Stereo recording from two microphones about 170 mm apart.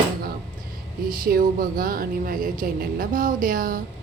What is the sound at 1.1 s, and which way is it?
A woman's voice, 55° right (ahead or behind).